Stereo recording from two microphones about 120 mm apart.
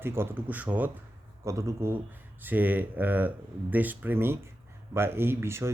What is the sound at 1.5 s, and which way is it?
Speech, 25° right (ahead or behind).